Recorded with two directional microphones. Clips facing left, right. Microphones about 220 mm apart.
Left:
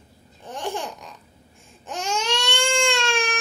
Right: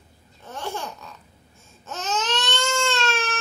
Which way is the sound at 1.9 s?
10° left (ahead or behind).